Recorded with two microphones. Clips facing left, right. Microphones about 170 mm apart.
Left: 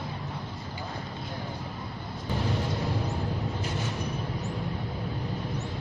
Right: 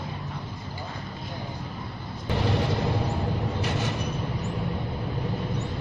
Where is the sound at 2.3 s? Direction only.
75° right (ahead or behind).